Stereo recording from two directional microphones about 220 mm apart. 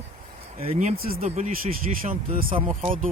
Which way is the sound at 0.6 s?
30° right (ahead or behind).